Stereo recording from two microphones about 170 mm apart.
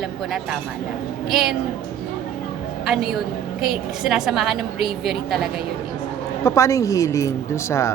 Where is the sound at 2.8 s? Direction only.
Centre (ahead or behind).